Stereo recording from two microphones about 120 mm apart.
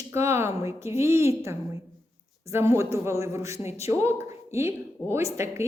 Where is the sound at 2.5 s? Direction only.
20° right (ahead or behind).